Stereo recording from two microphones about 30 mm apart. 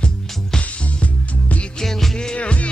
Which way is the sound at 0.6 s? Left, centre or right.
Left.